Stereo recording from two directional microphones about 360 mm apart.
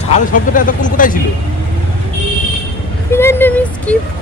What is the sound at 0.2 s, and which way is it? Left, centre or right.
Speech, left.